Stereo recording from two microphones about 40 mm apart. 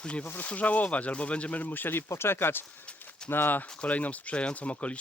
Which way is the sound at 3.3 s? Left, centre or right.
Left.